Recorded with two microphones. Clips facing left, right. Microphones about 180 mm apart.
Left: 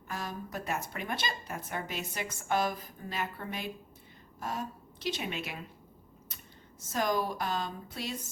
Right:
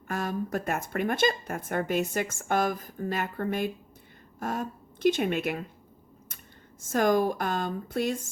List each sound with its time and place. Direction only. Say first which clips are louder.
0.1 s a woman's voice: right 8 dB; 50° right (ahead or behind)
6.8 s speech: right 7 dB; 50° right (ahead or behind)